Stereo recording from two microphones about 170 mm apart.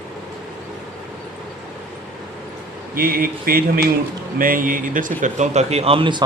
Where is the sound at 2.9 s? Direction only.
60° right (ahead or behind); by 6.2 s 30° right (ahead or behind).